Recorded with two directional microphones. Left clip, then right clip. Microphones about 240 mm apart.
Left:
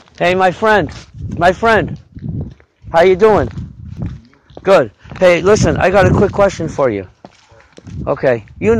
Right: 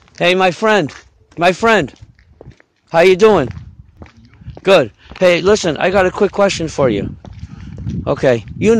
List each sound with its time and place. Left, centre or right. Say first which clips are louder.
0.2 s speech: left 1 dB; right
4.6 s speech: even; centre
5.2 s speech: left 2 dB; centre
6.2 s speech: left 1 dB; centre
8.0 s speech: even; right